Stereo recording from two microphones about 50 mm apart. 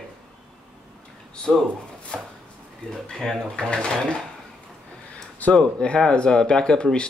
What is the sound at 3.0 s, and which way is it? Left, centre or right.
Speech, centre.